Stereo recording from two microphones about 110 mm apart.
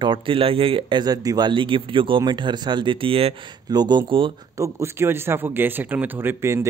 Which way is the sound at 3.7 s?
40° right (ahead or behind).